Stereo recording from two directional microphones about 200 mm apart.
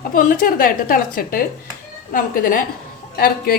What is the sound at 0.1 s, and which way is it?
A woman's voice, 45° left (ahead or behind).